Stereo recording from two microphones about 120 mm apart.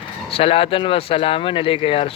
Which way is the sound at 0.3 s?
50° left (ahead or behind).